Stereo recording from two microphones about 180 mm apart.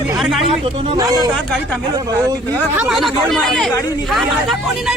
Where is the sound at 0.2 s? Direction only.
Centre (ahead or behind).